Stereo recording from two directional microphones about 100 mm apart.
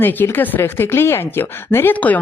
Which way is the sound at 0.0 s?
20° left (ahead or behind).